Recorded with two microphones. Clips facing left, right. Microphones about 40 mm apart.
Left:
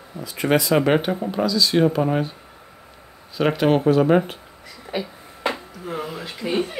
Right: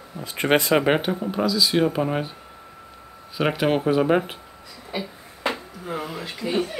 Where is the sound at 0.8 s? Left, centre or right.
Centre.